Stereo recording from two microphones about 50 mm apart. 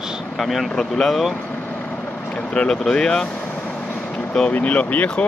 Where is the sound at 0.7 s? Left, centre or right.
Centre.